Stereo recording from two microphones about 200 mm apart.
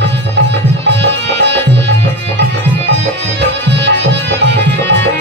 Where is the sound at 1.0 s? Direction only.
60° right (ahead or behind).